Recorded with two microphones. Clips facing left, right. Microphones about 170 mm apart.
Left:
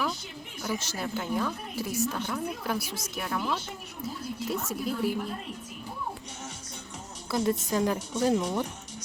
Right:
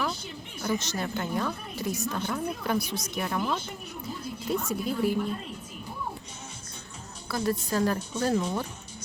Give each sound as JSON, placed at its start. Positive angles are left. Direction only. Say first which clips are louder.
{"t": 0.6, "sound": "a woman's voice", "louder": "right 3 dB", "side_deg": 5}
{"t": 7.3, "sound": "a woman's voice", "louder": "left 1 dB", "side_deg": 20}